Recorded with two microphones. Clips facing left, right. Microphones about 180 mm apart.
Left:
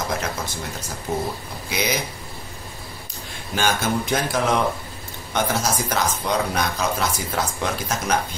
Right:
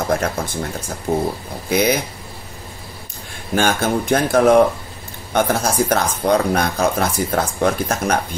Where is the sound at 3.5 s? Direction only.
55° right (ahead or behind).